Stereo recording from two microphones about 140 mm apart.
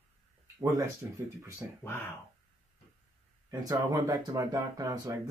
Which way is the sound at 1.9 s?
15° left (ahead or behind).